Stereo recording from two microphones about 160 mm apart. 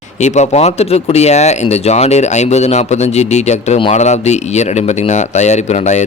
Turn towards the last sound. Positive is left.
turn(degrees=45)  # may be behind; listen again after turning